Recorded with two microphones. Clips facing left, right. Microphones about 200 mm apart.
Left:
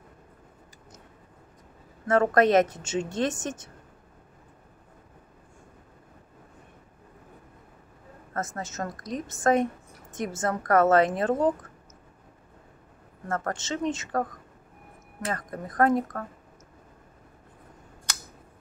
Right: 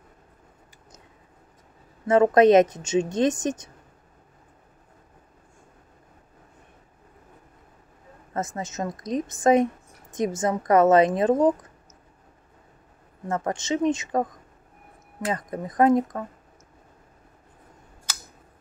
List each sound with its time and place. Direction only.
2.0 s a woman's voice: 20° right (ahead or behind)
8.3 s a woman's voice: 15° right (ahead or behind)
13.3 s a woman's voice: 15° right (ahead or behind)
15.3 s a woman's voice: 15° right (ahead or behind)